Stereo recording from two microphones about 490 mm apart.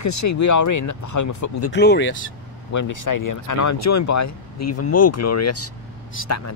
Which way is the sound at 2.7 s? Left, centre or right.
Left.